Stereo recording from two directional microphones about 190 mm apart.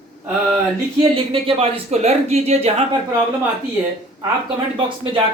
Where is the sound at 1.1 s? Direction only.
30° right (ahead or behind).